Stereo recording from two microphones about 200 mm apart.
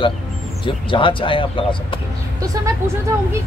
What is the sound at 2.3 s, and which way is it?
Speech, 15° right (ahead or behind).